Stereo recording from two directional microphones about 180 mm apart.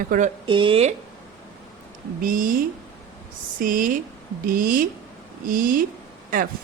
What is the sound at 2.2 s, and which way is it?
Speech, 50° right (ahead or behind).